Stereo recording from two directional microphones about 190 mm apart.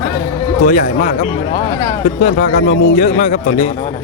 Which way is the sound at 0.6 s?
40° left (ahead or behind).